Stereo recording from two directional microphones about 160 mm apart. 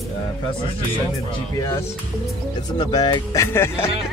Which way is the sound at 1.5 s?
20° left (ahead or behind).